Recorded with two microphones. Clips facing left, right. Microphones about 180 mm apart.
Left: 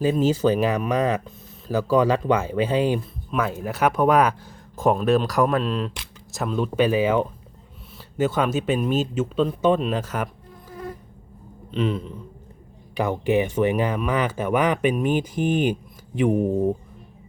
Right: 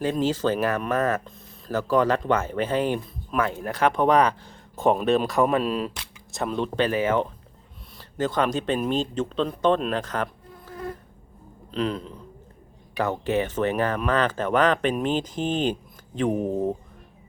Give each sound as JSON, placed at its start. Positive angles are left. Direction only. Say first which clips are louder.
{"t": 0.0, "sound": "speech", "louder": "left 4 dB", "side_deg": 10}
{"t": 11.7, "sound": "speech", "louder": "left 2 dB", "side_deg": 5}
{"t": 13.0, "sound": "speech", "louder": "left 3 dB", "side_deg": 15}